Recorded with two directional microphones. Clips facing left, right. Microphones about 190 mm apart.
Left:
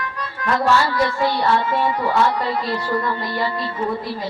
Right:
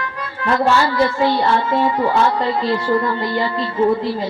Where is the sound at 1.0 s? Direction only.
30° right (ahead or behind).